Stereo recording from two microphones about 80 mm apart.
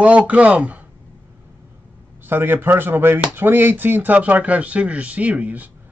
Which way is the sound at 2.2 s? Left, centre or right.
Right.